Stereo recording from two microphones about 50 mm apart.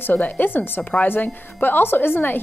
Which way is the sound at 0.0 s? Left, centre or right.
Left.